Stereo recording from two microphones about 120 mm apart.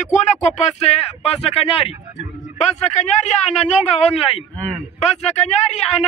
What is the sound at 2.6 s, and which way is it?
A man's voice, 70° left (ahead or behind).